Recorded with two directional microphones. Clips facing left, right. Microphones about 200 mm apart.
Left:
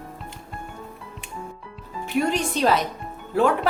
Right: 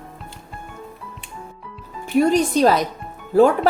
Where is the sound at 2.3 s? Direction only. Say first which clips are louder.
Right 5 dB; 40° right (ahead or behind).